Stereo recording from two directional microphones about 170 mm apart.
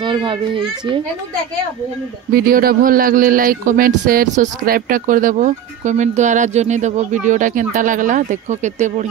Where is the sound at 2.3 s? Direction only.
60° right (ahead or behind).